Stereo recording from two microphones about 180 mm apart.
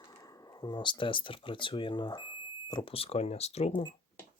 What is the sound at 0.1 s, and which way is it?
Speech, 20° left (ahead or behind).